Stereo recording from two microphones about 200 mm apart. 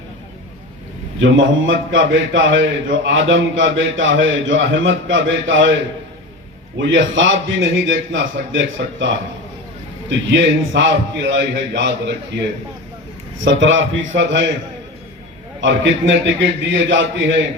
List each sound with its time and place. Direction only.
1.2 s a man's voice: 70° right (ahead or behind)
6.7 s a man's voice: 70° right (ahead or behind)
15.6 s a man's voice: 65° right (ahead or behind)